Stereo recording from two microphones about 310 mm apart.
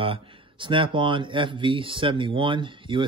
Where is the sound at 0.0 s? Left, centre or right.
Centre.